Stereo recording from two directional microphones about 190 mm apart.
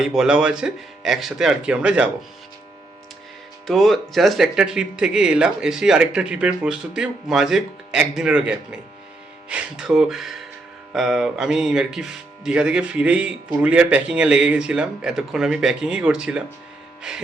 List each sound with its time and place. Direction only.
0.0 s speech: 5° right (ahead or behind)
3.7 s speech: centre (ahead or behind)